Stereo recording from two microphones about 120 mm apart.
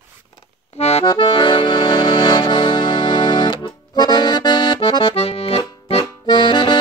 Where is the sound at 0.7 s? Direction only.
65° left (ahead or behind).